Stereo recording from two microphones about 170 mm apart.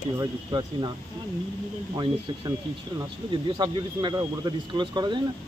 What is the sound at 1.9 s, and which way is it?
Speech, 25° right (ahead or behind).